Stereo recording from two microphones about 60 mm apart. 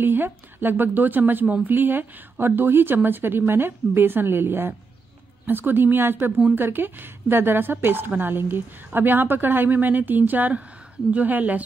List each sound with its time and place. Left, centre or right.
0.0 s speech: right